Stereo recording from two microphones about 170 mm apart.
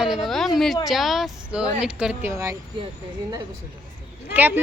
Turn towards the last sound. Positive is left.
turn(degrees=-10)  # may be behind; listen again after turning